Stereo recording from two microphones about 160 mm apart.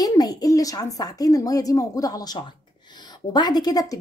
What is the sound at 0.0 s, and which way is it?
A woman's voice, 25° left (ahead or behind).